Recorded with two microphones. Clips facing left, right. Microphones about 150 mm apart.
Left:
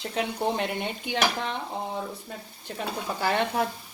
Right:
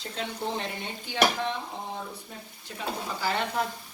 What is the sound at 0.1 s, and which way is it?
Stir, 60° left (ahead or behind).